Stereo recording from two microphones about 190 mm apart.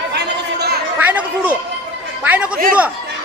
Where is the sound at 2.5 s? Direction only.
50° right (ahead or behind).